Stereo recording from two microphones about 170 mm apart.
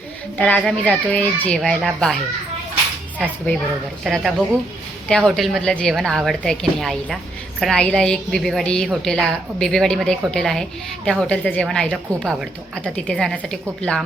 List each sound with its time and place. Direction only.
0.3 s a child's voice: 10° left (ahead or behind)
3.2 s a child's voice: 5° left (ahead or behind)